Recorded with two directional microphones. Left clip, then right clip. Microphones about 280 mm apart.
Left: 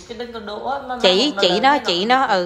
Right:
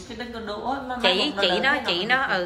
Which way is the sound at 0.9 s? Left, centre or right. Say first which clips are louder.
Left 6 dB; centre.